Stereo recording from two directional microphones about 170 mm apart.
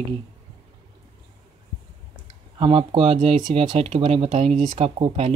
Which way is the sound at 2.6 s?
30° right (ahead or behind).